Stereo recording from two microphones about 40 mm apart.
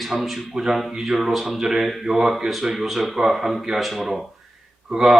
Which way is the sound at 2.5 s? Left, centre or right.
Centre.